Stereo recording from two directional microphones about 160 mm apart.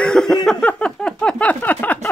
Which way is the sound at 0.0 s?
5° left (ahead or behind).